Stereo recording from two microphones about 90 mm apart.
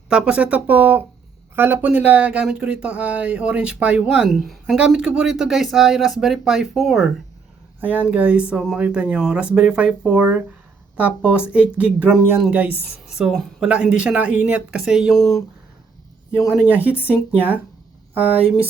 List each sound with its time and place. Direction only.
0.1 s speech: 10° right (ahead or behind)
4.3 s speech: 5° right (ahead or behind)
7.8 s speech: 15° right (ahead or behind)
15.2 s speech: 35° left (ahead or behind)
16.4 s speech: 5° right (ahead or behind)
16.6 s speech: 20° right (ahead or behind)
16.9 s speech: 25° left (ahead or behind)
17.3 s speech: 20° right (ahead or behind)